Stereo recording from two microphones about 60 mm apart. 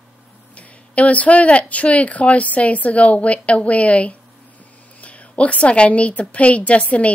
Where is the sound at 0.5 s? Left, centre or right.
Left.